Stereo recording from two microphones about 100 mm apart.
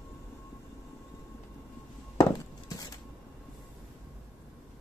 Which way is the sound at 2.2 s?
35° left (ahead or behind).